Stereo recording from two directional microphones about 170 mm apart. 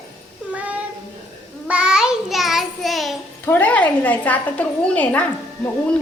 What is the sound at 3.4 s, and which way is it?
A woman's voice, 10° left (ahead or behind).